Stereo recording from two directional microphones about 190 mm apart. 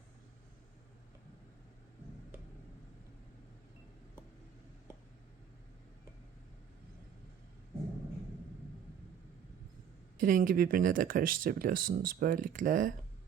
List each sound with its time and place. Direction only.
10.2 s speech: 45° right (ahead or behind)